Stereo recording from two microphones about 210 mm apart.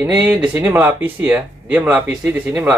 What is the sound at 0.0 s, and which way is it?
Speech, 10° right (ahead or behind).